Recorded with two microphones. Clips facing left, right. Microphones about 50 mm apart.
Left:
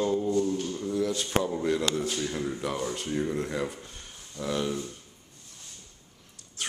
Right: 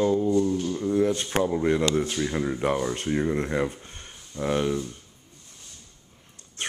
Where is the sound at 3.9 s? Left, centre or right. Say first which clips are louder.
Right 2 dB; right.